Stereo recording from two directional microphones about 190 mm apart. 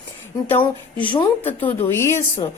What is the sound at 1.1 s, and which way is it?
Speech, 25° left (ahead or behind).